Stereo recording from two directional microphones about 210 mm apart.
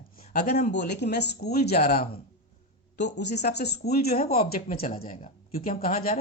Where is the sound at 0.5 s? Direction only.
40° left (ahead or behind).